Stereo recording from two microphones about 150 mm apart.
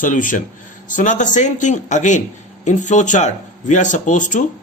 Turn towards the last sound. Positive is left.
turn(degrees=55)  # may be behind; listen again after turning